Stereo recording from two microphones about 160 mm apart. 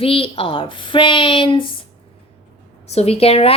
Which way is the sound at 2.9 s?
40° left (ahead or behind).